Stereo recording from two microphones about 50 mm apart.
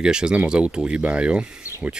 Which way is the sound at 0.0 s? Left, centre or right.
Centre.